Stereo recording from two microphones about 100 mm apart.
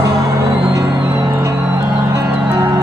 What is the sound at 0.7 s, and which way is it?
Music, 40° right (ahead or behind).